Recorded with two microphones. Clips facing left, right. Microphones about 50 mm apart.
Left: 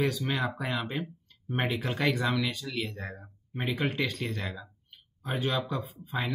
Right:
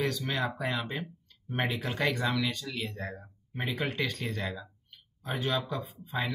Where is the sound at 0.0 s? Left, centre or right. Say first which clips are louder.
Left 2 dB; centre.